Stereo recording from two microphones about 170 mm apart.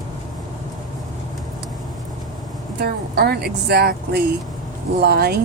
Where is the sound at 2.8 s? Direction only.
70° right (ahead or behind).